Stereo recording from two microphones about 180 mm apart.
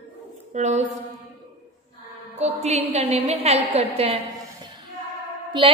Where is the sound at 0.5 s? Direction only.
40° right (ahead or behind).